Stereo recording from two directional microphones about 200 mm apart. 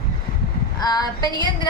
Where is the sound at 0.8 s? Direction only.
20° left (ahead or behind).